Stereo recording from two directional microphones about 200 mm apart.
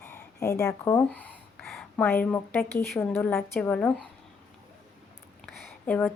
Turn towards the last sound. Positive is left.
turn(degrees=5)  # may be behind; listen again after turning